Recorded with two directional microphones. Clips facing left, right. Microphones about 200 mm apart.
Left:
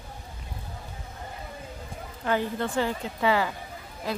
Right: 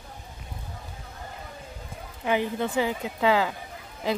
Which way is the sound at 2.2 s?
15° right (ahead or behind).